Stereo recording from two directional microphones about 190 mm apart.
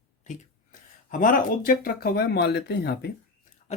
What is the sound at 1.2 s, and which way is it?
Speech, 45° left (ahead or behind).